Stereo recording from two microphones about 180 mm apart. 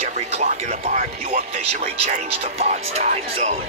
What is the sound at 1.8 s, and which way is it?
Speech, 35° right (ahead or behind).